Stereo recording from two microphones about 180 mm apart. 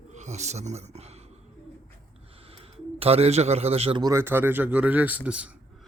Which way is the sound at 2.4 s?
35° right (ahead or behind).